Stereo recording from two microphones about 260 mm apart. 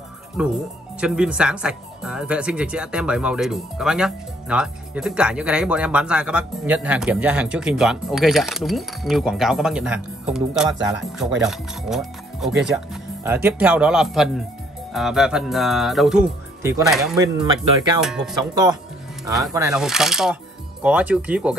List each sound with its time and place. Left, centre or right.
1.0 s speech: centre
17.2 s speech: centre
18.0 s speech: centre
18.5 s speech: centre